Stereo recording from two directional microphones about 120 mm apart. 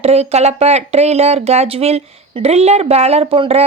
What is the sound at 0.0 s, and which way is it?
Speech, 60° right (ahead or behind).